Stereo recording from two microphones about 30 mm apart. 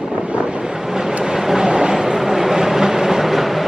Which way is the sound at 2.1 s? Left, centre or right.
Centre.